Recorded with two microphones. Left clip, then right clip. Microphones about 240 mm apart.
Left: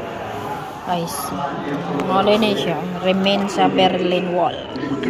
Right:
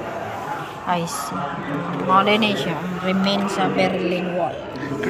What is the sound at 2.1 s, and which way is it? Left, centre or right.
Speech, right.